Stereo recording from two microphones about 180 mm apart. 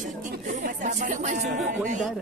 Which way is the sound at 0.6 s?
45° right (ahead or behind).